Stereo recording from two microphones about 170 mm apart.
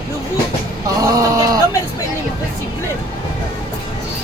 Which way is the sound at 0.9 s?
20° right (ahead or behind).